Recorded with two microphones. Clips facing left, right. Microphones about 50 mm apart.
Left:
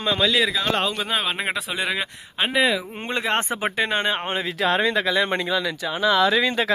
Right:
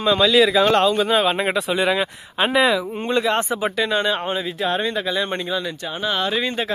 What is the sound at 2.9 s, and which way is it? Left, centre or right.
Speech, left.